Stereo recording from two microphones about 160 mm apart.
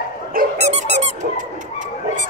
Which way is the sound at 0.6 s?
45° right (ahead or behind).